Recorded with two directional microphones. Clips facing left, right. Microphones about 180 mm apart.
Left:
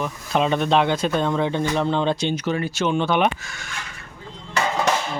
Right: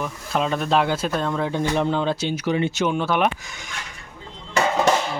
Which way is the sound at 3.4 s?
15° right (ahead or behind).